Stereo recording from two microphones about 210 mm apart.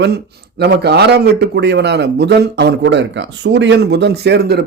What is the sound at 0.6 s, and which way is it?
Speech, 50° right (ahead or behind).